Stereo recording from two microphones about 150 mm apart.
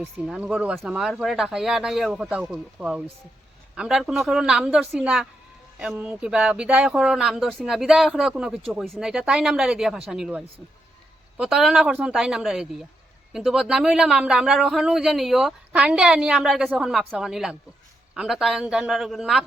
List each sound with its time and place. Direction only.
0.0 s speech: 5° right (ahead or behind)